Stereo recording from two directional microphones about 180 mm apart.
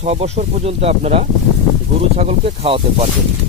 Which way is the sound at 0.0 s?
35° right (ahead or behind).